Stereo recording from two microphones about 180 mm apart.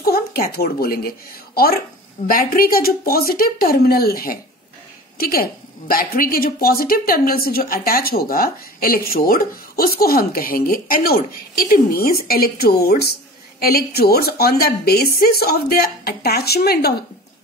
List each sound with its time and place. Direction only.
0.0 s a woman's voice: 60° left (ahead or behind)